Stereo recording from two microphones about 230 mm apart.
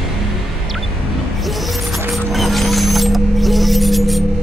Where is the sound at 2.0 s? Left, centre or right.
Centre.